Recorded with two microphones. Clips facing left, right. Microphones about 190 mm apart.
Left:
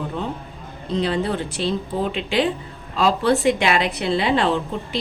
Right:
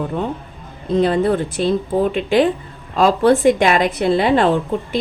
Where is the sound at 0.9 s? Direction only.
50° right (ahead or behind).